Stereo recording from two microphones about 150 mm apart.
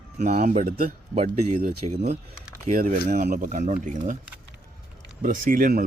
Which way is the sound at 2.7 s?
60° right (ahead or behind).